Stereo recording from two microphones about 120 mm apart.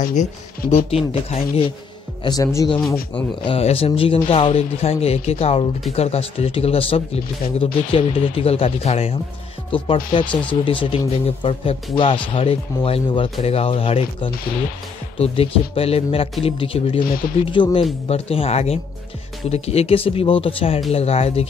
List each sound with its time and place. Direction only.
0.1 s speech: 70° left (ahead or behind)
2.2 s speech: 30° left (ahead or behind)
3.4 s speech: 55° left (ahead or behind)
9.7 s speech: 45° left (ahead or behind)
18.0 s speech: 55° left (ahead or behind)